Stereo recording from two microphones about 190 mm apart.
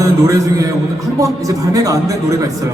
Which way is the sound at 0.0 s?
15° right (ahead or behind).